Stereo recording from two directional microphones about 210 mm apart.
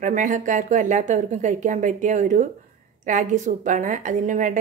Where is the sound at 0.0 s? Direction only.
40° right (ahead or behind).